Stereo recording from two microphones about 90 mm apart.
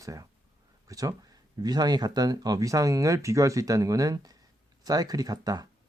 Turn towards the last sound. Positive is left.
turn(degrees=-45)  # may be behind; listen again after turning